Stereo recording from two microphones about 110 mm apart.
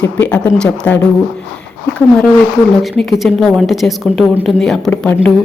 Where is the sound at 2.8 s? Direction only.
Centre (ahead or behind).